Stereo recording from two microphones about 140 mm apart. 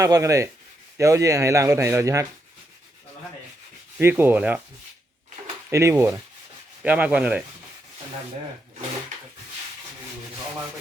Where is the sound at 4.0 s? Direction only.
15° right (ahead or behind).